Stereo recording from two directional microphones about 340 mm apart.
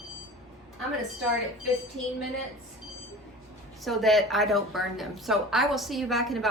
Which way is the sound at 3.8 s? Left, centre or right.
Centre.